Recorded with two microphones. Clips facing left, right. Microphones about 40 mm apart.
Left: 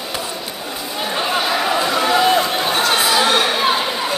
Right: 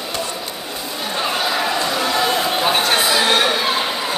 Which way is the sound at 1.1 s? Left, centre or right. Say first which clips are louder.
Left 1 dB; centre.